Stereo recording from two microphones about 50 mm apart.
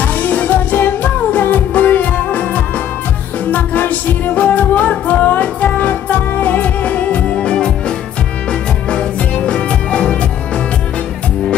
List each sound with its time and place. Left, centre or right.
0.0 s music: left; by 7.7 s centre
9.5 s music: centre